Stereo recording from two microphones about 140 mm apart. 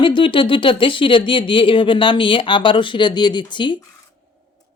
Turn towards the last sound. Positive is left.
turn(degrees=35)  # may be behind; listen again after turning